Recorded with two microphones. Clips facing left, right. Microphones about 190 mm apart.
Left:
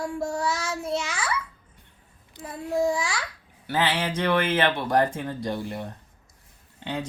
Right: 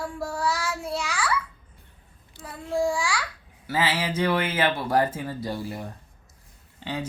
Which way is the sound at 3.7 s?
5° right (ahead or behind).